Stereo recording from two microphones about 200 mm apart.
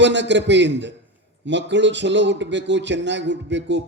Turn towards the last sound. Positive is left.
turn(degrees=-60)  # may be behind; listen again after turning